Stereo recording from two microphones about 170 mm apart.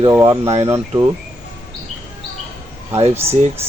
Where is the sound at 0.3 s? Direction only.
35° right (ahead or behind).